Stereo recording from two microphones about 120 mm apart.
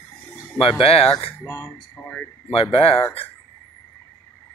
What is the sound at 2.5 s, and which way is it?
Speech, 50° left (ahead or behind).